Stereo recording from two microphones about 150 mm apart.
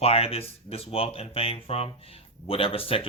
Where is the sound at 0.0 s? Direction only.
40° left (ahead or behind).